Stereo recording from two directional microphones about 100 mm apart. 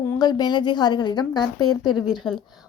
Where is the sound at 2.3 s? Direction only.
5° left (ahead or behind).